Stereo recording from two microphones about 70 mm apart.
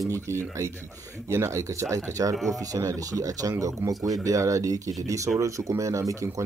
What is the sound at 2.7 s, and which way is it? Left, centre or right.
Speech, right.